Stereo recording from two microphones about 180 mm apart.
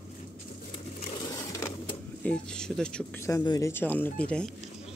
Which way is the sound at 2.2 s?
5° left (ahead or behind).